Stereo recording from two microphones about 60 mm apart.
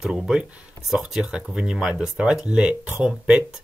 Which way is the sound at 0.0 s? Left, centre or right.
Centre.